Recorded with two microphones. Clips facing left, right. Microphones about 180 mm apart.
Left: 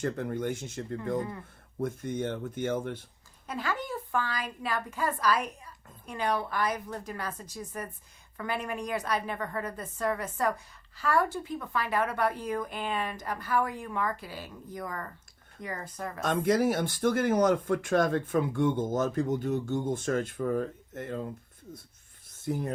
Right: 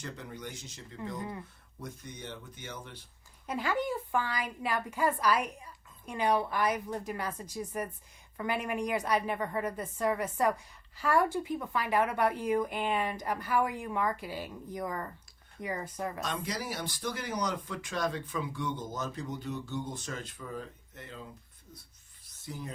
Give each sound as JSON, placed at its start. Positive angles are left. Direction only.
{"t": 0.0, "sound": "speech", "side_deg": 50}
{"t": 3.4, "sound": "a woman's voice", "side_deg": -15}
{"t": 16.2, "sound": "speech", "side_deg": 50}
{"t": 22.3, "sound": "a sound", "side_deg": 50}